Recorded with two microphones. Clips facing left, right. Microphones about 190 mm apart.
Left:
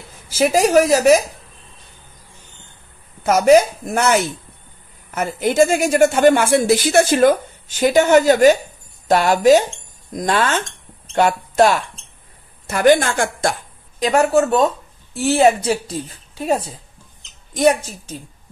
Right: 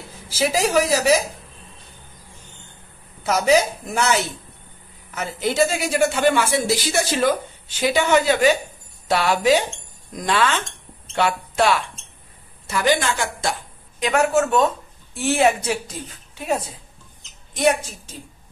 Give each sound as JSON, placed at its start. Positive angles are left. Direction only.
{"t": 0.3, "sound": "a woman's voice", "side_deg": 50}
{"t": 3.3, "sound": "a woman's voice", "side_deg": 50}
{"t": 13.9, "sound": "speech", "side_deg": 35}